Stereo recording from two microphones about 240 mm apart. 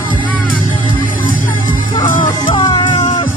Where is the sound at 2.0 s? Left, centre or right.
Left.